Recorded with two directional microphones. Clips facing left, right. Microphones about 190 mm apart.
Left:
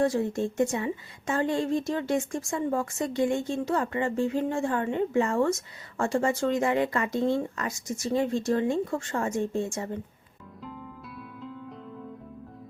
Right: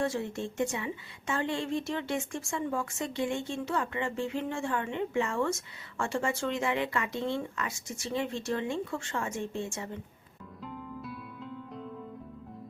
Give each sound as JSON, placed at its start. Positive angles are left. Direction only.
{"t": 0.0, "sound": "a woman's voice", "side_deg": 40}
{"t": 10.6, "sound": "music", "side_deg": 0}